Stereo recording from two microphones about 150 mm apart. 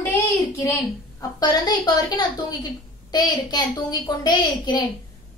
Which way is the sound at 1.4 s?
30° left (ahead or behind).